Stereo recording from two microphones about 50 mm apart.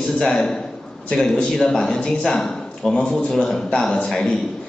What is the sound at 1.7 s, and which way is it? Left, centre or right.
Speech, centre.